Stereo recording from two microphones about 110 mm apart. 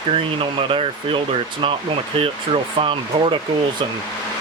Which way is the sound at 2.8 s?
55° right (ahead or behind).